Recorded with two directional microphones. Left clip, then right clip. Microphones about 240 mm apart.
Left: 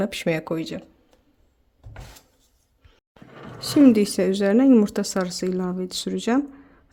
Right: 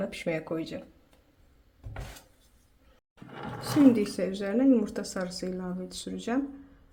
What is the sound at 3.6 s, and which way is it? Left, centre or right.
Speech, left.